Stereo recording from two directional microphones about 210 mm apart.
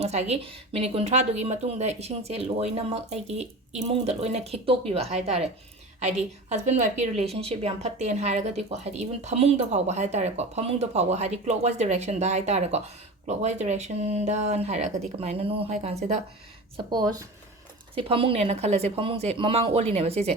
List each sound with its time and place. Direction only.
0.0 s a woman's voice: 30° right (ahead or behind)
16.7 s speech: 20° right (ahead or behind)